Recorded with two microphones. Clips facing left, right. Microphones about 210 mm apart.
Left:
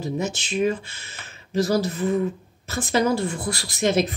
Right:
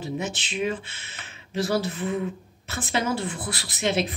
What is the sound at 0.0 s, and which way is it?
A man's voice, 40° left (ahead or behind).